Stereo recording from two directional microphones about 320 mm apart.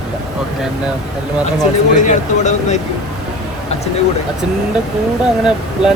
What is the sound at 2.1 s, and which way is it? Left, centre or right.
Speech, left.